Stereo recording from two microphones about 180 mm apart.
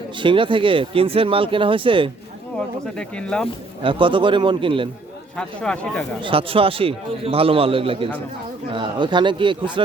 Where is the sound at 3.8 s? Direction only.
30° right (ahead or behind).